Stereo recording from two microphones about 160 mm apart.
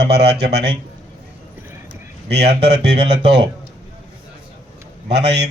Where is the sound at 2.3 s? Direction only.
90° right.